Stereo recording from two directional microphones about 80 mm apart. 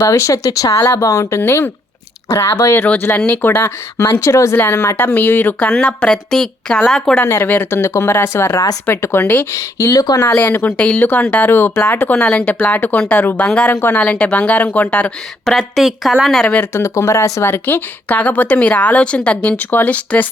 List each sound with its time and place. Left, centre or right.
0.0 s speech: left
0.7 s speech: left
1.4 s a woman's voice: left
2.8 s a woman's voice: left; by 7.1 s centre
7.4 s a woman's voice: left
7.7 s a woman's voice: left
9.5 s speech: left
10.3 s a woman's voice: left
15.4 s speech: centre
16.7 s speech: left
17.5 s a woman's voice: left